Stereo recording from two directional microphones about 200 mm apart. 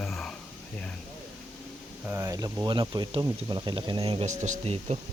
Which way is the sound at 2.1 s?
15° right (ahead or behind).